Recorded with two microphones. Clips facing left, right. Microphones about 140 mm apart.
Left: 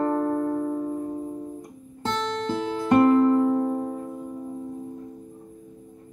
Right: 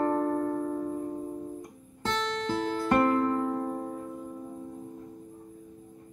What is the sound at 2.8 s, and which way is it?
Music, 25° left (ahead or behind).